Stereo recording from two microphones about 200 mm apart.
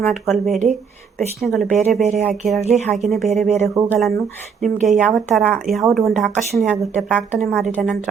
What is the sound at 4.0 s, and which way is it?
A woman's voice, centre (ahead or behind).